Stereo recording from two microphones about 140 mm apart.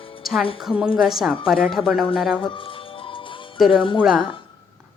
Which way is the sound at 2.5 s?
40° left (ahead or behind).